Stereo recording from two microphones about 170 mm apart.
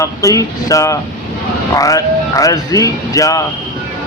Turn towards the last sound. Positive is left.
turn(degrees=20)  # may be behind; listen again after turning